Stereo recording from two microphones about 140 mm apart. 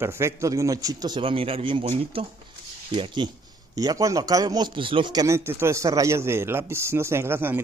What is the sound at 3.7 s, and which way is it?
A man's voice, 25° right (ahead or behind).